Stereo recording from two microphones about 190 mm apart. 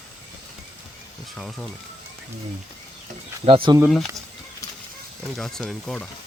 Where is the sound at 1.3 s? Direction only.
Centre (ahead or behind).